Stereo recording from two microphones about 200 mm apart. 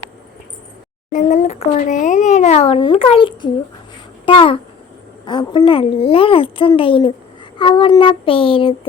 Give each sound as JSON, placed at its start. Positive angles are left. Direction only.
{"t": 1.1, "sound": "a child's voice", "side_deg": 35}